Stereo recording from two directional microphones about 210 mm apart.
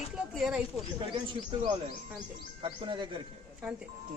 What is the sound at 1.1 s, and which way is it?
Speech, 20° right (ahead or behind).